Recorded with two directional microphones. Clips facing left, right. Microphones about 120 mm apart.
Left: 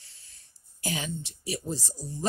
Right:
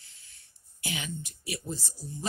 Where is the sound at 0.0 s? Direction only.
35° left (ahead or behind).